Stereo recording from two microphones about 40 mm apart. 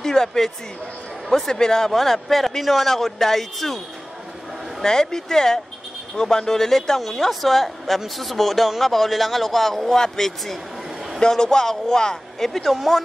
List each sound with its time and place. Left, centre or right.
0.0 s speech: centre
1.5 s speech: centre
4.8 s speech: centre
11.1 s speech: centre